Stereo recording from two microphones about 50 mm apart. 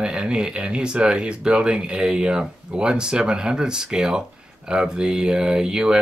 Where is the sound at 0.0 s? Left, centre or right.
Centre.